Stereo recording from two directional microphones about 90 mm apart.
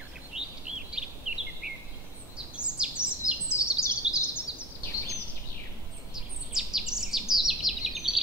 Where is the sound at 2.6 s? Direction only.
10° right (ahead or behind).